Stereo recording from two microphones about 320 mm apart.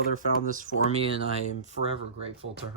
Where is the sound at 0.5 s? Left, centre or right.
Right.